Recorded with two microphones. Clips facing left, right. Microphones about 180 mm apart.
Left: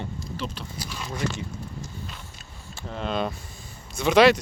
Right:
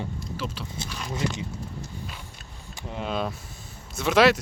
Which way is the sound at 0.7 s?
25° right (ahead or behind).